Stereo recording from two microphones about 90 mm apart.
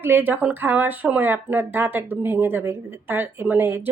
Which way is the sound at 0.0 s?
20° right (ahead or behind).